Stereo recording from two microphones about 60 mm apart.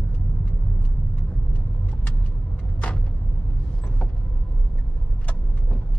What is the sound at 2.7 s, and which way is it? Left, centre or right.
Vehicle, left.